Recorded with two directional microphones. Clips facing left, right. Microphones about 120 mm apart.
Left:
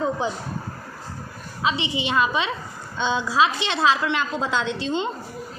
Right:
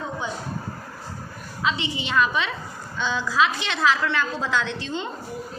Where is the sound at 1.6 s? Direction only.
20° left (ahead or behind).